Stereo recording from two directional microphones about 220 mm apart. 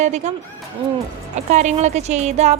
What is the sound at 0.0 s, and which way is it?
Speech, 30° right (ahead or behind).